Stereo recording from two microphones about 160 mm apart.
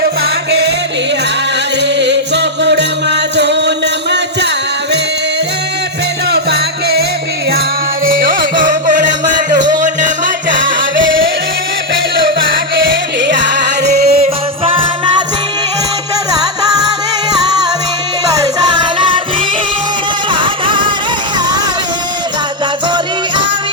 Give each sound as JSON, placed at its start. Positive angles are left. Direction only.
{"t": 1.8, "sound": "music", "side_deg": -90}
{"t": 6.3, "sound": "music", "side_deg": -90}
{"t": 8.0, "sound": "music", "side_deg": -60}
{"t": 14.1, "sound": "music", "side_deg": -35}
{"t": 18.3, "sound": "music", "side_deg": -25}
{"t": 20.3, "sound": "vehicle", "side_deg": -30}